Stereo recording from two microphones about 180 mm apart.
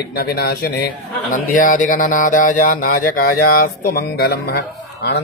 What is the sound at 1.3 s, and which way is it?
Speech, 50° left (ahead or behind).